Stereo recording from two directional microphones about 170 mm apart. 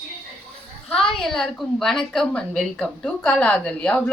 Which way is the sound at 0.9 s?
5° left (ahead or behind).